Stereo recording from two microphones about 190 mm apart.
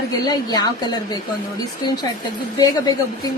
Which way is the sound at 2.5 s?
20° left (ahead or behind).